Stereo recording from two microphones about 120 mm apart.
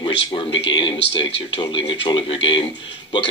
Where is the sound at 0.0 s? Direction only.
45° left (ahead or behind).